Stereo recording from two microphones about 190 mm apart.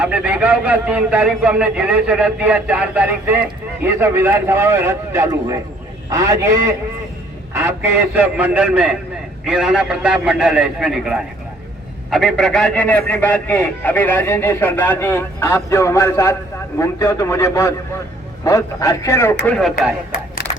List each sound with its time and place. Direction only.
0.0 s a man's voice: 5° right (ahead or behind); by 19.4 s 15° left (ahead or behind)
19.5 s a man's voice: 5° left (ahead or behind)